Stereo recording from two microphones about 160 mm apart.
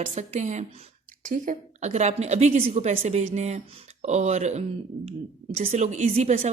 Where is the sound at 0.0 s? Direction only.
45° right (ahead or behind).